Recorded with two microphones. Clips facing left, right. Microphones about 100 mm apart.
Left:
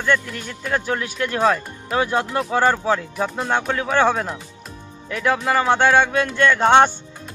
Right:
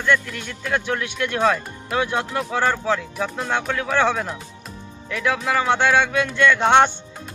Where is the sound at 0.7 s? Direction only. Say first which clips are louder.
Left 1 dB; centre (ahead or behind).